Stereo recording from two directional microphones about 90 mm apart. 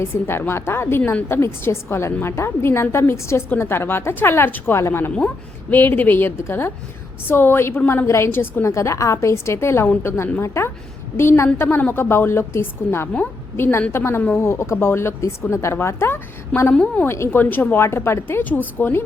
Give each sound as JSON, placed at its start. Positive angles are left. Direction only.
{"t": 0.0, "sound": "a woman's voice", "side_deg": 25}
{"t": 16.7, "sound": "a woman's voice", "side_deg": 15}